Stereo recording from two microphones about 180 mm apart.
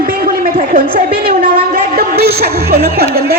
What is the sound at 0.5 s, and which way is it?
A woman's voice, 50° right (ahead or behind).